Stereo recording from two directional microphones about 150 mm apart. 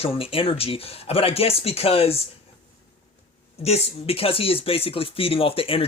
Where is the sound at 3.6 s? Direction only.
40° left (ahead or behind).